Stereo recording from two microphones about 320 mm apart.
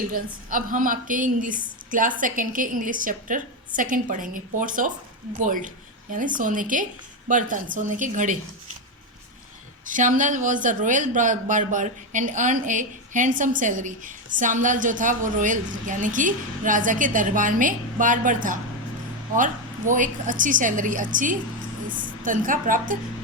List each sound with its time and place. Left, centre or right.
0.1 s speech: right
9.8 s a woman's voice: right